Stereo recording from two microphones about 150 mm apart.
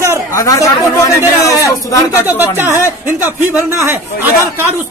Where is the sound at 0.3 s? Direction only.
20° left (ahead or behind).